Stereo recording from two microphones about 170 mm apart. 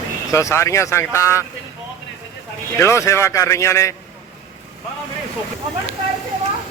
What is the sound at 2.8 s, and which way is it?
Speech, 15° left (ahead or behind).